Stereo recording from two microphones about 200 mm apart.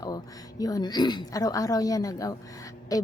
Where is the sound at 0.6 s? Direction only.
20° left (ahead or behind).